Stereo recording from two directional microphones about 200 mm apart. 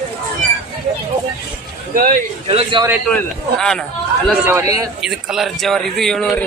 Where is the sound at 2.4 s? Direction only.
25° right (ahead or behind).